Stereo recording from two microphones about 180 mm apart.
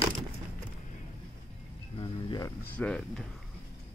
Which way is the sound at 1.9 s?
25° left (ahead or behind).